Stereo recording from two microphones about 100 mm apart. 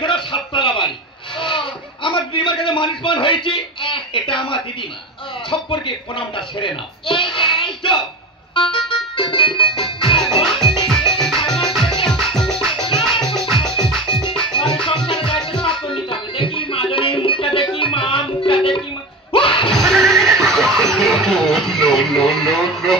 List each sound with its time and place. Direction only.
0.0 s a sound: 55° left (ahead or behind)
5.5 s speech: 55° left (ahead or behind)
8.7 s music: 55° left (ahead or behind)
10.4 s music: 5° left (ahead or behind)
14.3 s music: 55° left (ahead or behind)
19.7 s music: 5° left (ahead or behind)